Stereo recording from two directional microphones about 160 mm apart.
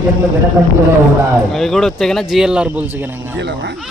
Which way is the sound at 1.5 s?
Centre (ahead or behind).